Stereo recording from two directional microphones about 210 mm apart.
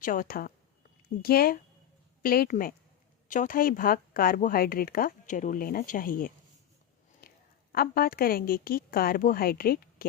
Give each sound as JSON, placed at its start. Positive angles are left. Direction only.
{"t": 0.0, "sound": "a woman's voice", "side_deg": 40}